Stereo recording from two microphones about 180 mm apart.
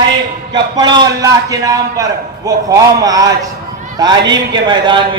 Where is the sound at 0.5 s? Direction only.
25° right (ahead or behind).